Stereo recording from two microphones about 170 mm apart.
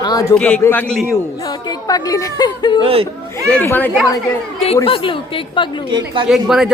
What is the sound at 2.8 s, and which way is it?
Speech, 35° right (ahead or behind).